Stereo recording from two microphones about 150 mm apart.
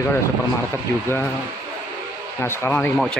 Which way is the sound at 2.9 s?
Centre (ahead or behind).